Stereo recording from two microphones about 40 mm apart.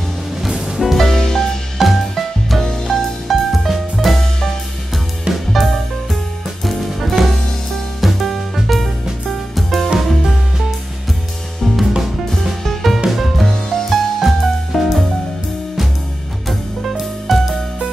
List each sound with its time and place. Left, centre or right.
0.5 s music: centre
0.8 s music: centre
1.8 s music: centre
5.5 s music: centre
11.6 s music: centre
17.3 s music: centre